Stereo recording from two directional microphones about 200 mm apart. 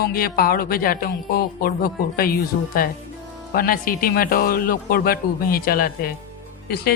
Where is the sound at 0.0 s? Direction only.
50° left (ahead or behind).